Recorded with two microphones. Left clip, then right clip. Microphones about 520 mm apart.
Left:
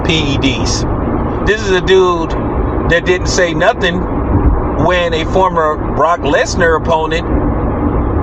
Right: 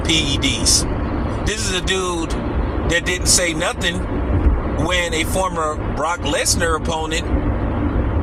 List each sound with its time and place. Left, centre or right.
1.5 s speech: right